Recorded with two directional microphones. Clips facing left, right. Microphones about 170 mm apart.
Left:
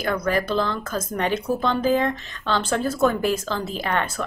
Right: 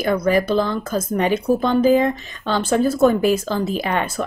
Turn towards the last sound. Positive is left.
turn(degrees=-10)  # may be behind; listen again after turning